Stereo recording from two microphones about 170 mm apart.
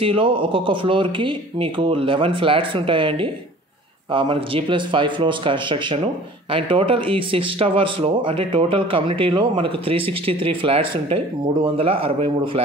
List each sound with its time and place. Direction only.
0.0 s a man's voice: 30° right (ahead or behind)